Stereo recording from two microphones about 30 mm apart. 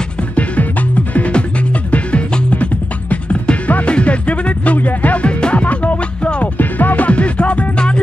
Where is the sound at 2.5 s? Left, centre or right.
Left.